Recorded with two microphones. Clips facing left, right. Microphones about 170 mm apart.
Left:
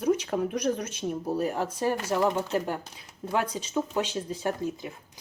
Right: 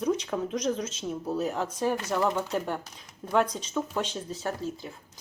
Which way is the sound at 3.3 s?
10° left (ahead or behind).